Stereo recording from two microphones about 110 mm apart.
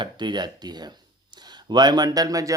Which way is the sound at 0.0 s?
45° right (ahead or behind).